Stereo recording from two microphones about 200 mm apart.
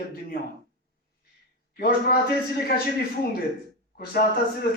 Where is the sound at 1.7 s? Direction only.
50° left (ahead or behind).